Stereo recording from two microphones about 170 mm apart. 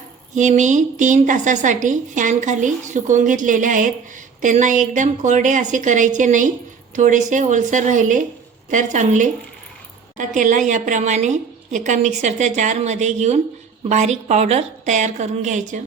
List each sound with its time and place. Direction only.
0.3 s a woman's voice: 45° right (ahead or behind)